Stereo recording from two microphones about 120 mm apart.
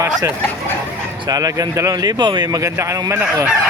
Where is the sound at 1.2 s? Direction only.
30° right (ahead or behind).